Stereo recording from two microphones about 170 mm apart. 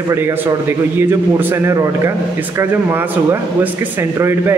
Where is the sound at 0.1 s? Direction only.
10° right (ahead or behind).